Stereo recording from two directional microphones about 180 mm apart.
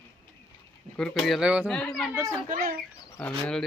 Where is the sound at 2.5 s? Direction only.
50° right (ahead or behind).